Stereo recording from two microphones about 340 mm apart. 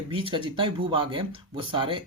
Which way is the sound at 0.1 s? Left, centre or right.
Centre.